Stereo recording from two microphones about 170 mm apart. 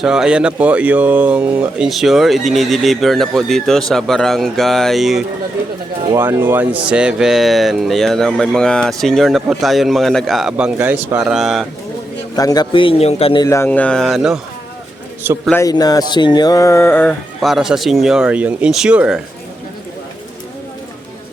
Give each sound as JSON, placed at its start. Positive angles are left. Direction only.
{"t": 0.0, "sound": "speech", "side_deg": -5}
{"t": 6.1, "sound": "speech", "side_deg": -15}
{"t": 12.4, "sound": "a man's voice", "side_deg": 20}
{"t": 13.4, "sound": "speech", "side_deg": 15}
{"t": 15.5, "sound": "a sound", "side_deg": 20}
{"t": 17.4, "sound": "speech", "side_deg": 0}